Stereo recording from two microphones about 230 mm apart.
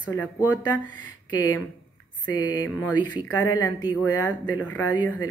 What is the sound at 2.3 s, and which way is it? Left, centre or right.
Speech, centre.